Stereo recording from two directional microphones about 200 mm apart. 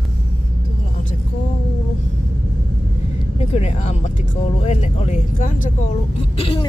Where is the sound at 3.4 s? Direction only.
30° left (ahead or behind).